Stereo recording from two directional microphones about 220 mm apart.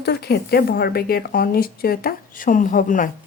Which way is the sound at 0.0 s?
45° left (ahead or behind).